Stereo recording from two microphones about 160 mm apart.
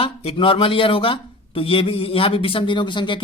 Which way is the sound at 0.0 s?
35° left (ahead or behind).